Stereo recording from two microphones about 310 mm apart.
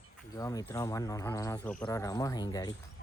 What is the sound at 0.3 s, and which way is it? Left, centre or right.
Speech, centre.